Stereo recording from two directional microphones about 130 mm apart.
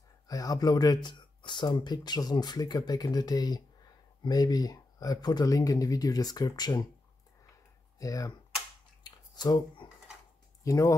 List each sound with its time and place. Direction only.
0.3 s speech: 30° left (ahead or behind)
8.0 s speech: 25° left (ahead or behind)
9.0 s a sound: 30° left (ahead or behind)
10.6 s speech: 25° left (ahead or behind)